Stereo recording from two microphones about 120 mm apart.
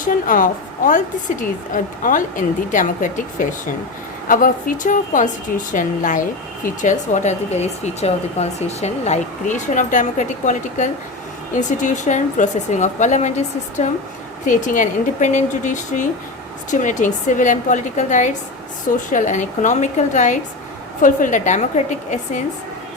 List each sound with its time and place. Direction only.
0.0 s speech: 90° left
4.8 s speech: 90° left